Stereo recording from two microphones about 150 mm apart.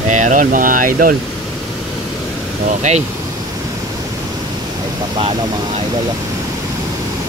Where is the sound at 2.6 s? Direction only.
50° right (ahead or behind).